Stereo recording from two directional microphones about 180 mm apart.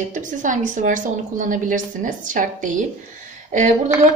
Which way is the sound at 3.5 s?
45° right (ahead or behind).